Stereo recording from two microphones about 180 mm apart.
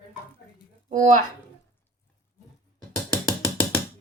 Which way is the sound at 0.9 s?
45° right (ahead or behind).